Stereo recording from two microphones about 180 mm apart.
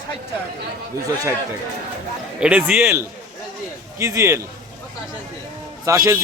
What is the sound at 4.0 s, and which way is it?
Speech, 15° right (ahead or behind).